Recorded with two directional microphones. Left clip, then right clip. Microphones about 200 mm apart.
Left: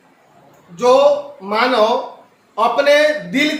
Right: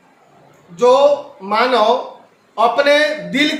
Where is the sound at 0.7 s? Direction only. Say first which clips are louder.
Right 1 dB; 20° right (ahead or behind).